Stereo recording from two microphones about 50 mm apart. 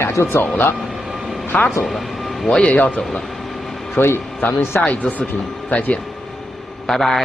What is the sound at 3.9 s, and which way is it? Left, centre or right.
Speech, left.